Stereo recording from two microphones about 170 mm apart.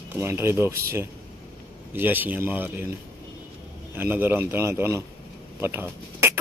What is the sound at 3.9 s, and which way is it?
Speech, 10° right (ahead or behind).